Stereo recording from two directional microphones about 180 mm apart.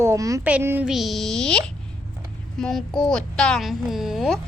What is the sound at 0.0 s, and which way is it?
A child's voice, 15° right (ahead or behind).